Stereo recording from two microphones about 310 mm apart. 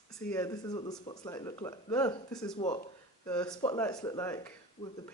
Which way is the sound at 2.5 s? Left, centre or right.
Centre.